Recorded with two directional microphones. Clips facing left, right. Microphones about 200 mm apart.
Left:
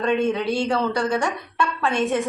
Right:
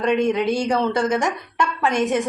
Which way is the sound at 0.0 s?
15° right (ahead or behind).